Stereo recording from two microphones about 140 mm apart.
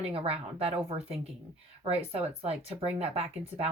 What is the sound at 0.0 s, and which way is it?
Speech, 45° right (ahead or behind).